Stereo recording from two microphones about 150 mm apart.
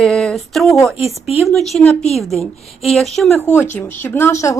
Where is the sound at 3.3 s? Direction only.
15° left (ahead or behind).